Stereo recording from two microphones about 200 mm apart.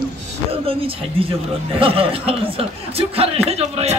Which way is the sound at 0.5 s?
25° right (ahead or behind).